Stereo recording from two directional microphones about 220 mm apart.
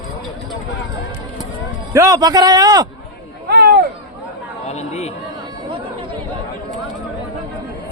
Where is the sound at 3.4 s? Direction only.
50° right (ahead or behind).